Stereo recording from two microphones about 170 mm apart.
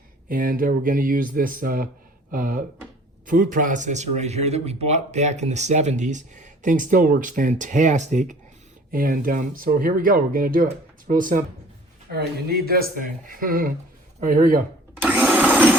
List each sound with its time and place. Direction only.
0.3 s speech: 55° right (ahead or behind)
12.1 s speech: 70° right (ahead or behind)
14.9 s a sound: 10° right (ahead or behind)